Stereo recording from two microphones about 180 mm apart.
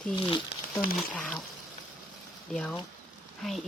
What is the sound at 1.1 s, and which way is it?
Speech, 5° left (ahead or behind).